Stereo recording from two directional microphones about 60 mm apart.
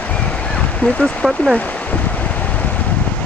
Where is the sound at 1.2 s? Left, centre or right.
Centre.